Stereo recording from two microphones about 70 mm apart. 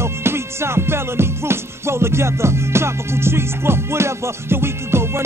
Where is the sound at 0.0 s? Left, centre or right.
Right.